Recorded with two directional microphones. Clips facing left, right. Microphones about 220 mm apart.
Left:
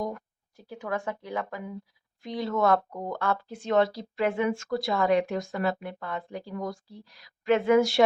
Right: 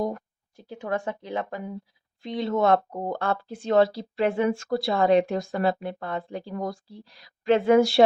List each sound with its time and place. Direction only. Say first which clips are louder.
0.0 s speech: right 4 dB; 30° right (ahead or behind)